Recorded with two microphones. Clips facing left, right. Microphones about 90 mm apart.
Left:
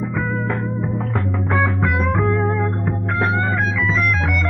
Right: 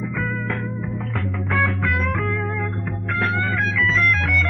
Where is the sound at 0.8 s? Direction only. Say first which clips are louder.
Left 5 dB; 35° left (ahead or behind).